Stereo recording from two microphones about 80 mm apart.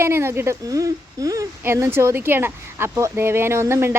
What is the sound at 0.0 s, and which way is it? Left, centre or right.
Speech, right.